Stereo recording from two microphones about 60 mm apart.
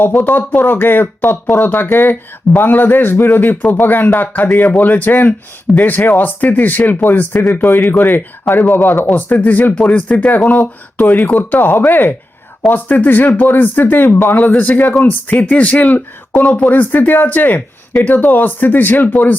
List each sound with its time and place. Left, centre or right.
0.0 s speech: left
8.4 s speech: left
9.1 s speech: left
14.5 s speech: left